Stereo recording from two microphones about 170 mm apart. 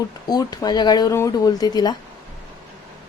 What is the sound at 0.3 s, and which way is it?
Speech, 25° left (ahead or behind).